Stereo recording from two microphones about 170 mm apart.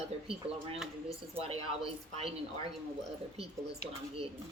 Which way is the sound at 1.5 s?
35° right (ahead or behind).